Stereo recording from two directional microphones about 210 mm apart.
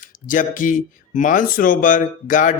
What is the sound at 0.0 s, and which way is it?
A man's voice, 40° left (ahead or behind).